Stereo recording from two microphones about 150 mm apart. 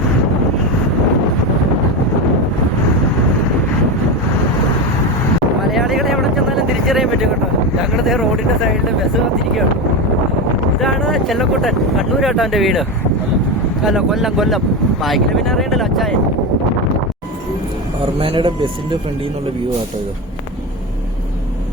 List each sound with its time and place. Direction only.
5.7 s vehicle: centre (ahead or behind)
7.8 s a sound: centre (ahead or behind)
10.8 s speech: centre (ahead or behind)
13.8 s speech: centre (ahead or behind)
18.2 s speech: 35° right (ahead or behind)